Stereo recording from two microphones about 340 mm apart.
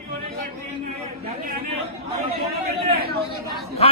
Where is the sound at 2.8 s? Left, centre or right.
Right.